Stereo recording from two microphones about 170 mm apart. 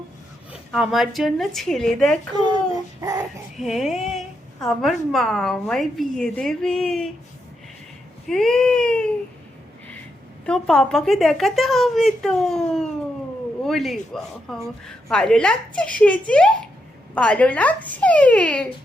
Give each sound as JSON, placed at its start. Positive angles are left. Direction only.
{"t": 0.7, "sound": "a woman's voice", "side_deg": 0}
{"t": 3.0, "sound": "child singing", "side_deg": -15}
{"t": 3.6, "sound": "a woman's voice", "side_deg": 0}
{"t": 8.3, "sound": "a woman's voice", "side_deg": 5}
{"t": 10.4, "sound": "a woman's voice", "side_deg": 5}